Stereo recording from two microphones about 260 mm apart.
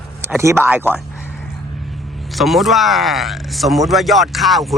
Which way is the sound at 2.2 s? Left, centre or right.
Centre.